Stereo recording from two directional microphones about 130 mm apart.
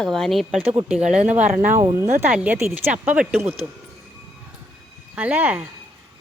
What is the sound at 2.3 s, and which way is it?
Speech, 10° right (ahead or behind).